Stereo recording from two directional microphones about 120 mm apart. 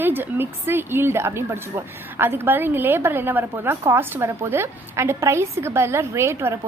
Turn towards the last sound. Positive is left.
turn(degrees=-20)  # may be behind; listen again after turning